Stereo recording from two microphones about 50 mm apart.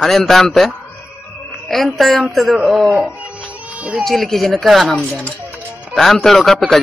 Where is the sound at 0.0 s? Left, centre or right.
Centre.